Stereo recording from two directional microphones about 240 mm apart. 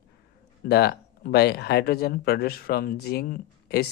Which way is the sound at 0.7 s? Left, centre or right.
Left.